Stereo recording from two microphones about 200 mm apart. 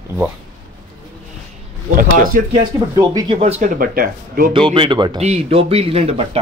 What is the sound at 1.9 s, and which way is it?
Speech, 45° right (ahead or behind).